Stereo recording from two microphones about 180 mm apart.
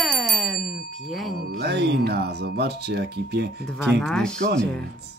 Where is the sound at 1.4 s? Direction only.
60° right (ahead or behind).